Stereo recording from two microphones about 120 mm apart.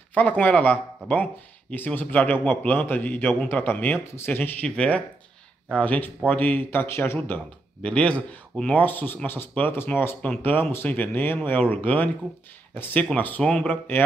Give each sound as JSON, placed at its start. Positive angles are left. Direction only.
{"t": 0.1, "sound": "speech", "side_deg": 15}